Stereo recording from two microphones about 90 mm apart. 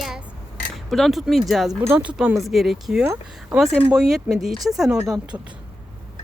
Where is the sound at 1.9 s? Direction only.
15° right (ahead or behind).